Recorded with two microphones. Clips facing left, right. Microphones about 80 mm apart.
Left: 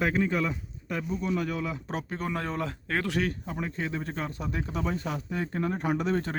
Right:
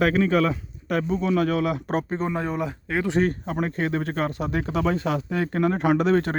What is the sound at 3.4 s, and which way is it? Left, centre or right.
Speech, right.